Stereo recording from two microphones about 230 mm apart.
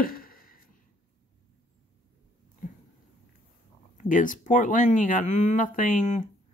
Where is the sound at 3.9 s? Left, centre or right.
Left.